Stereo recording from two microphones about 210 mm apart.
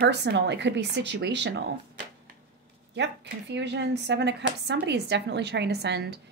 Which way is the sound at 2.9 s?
55° right (ahead or behind).